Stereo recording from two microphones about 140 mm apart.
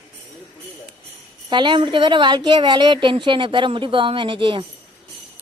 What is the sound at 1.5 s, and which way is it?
A woman's voice, 35° right (ahead or behind).